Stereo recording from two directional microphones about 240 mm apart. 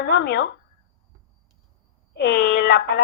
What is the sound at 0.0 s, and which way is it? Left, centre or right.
Speech, left.